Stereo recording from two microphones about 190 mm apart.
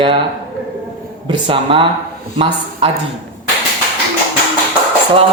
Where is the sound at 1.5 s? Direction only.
25° right (ahead or behind).